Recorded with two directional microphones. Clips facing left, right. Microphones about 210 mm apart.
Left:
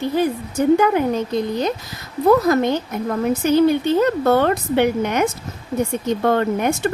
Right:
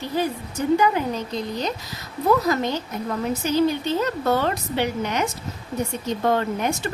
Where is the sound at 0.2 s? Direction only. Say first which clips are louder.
Left 4 dB; 55° left (ahead or behind).